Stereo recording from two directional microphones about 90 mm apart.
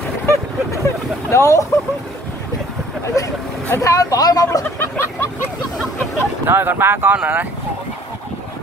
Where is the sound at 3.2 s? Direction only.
40° left (ahead or behind).